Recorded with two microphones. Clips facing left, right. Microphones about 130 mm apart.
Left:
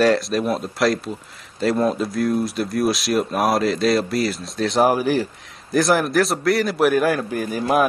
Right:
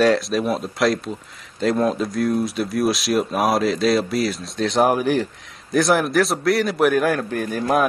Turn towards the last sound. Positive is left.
turn(degrees=5)  # may be behind; listen again after turning